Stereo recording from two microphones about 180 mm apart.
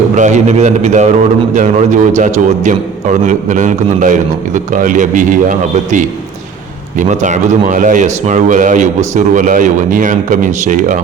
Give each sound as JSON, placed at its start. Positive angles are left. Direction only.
{"t": 0.2, "sound": "a man's voice", "side_deg": -40}